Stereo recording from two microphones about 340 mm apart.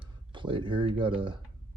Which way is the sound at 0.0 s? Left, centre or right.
Centre.